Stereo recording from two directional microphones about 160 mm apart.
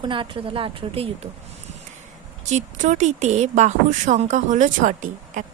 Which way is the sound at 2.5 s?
50° right (ahead or behind).